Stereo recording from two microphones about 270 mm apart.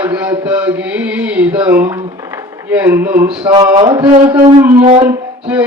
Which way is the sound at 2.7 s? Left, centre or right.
Centre.